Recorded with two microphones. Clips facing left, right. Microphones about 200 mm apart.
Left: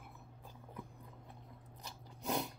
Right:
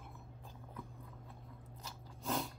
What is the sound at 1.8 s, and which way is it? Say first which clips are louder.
Biting: left 1 dB; 15° left (ahead or behind).